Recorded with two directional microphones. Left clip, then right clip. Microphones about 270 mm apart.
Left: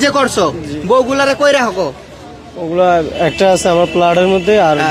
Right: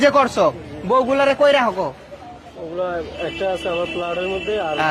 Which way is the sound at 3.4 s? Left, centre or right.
Left.